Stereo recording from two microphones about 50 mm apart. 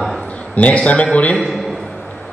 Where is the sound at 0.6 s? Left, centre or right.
Left.